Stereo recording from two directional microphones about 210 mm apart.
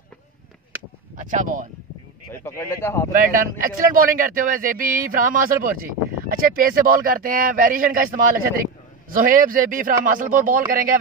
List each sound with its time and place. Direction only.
1.1 s speech: 35° right (ahead or behind)
2.4 s speech: 10° left (ahead or behind)
3.1 s speech: 40° right (ahead or behind)